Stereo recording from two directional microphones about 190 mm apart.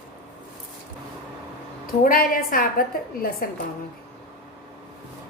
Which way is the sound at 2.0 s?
50° left (ahead or behind).